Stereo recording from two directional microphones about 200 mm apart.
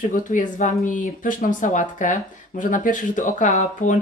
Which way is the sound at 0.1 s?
40° left (ahead or behind).